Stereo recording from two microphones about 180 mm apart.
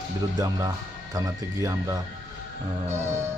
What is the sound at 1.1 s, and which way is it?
Speech, 20° right (ahead or behind).